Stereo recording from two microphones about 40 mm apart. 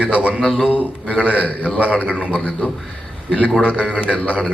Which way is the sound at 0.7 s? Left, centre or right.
Right.